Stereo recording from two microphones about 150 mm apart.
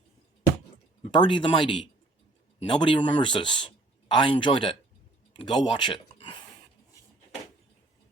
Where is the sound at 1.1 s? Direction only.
30° left (ahead or behind).